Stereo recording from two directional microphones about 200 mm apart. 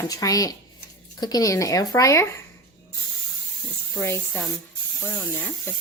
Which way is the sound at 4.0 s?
15° left (ahead or behind).